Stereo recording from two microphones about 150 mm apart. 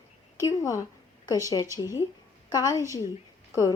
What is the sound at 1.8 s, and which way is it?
A woman's voice, 25° left (ahead or behind).